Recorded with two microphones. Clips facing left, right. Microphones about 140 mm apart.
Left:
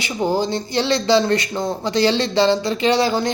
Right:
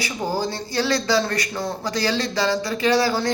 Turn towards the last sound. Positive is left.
turn(degrees=20)  # may be behind; listen again after turning